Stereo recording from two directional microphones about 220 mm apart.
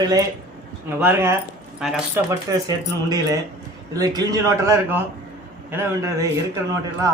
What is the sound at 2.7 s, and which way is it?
A man's voice, 15° right (ahead or behind).